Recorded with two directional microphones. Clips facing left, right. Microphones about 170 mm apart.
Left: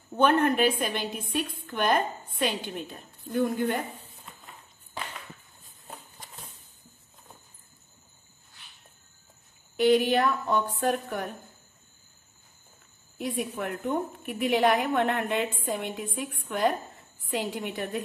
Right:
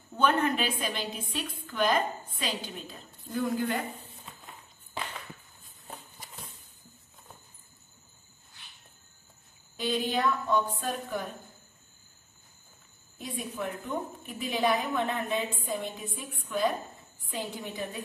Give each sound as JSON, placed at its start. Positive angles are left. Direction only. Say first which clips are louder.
{"t": 0.2, "sound": "a woman's voice", "louder": "left 4 dB", "side_deg": 55}
{"t": 9.8, "sound": "a woman's voice", "louder": "left 8 dB", "side_deg": 70}
{"t": 13.2, "sound": "a woman's voice", "louder": "left 4 dB", "side_deg": 65}